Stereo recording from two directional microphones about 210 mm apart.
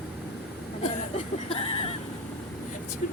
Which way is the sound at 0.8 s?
30° left (ahead or behind).